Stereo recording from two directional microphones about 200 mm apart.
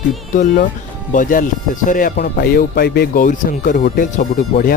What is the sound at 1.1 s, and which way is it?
Speech, 40° left (ahead or behind).